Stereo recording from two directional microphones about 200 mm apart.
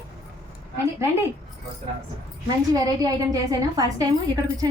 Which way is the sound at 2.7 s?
20° right (ahead or behind).